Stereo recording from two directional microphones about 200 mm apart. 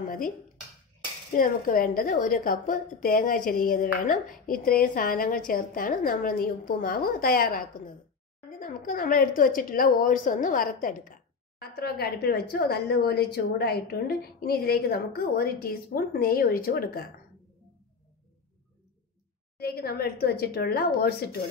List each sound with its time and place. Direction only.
0.0 s speech: 45° left (ahead or behind)
1.3 s a woman's voice: 45° left (ahead or behind)
19.6 s a woman's voice: 50° left (ahead or behind)